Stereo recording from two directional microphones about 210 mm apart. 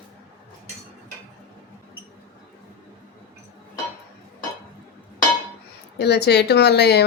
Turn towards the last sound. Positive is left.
turn(degrees=50)  # may be behind; listen again after turning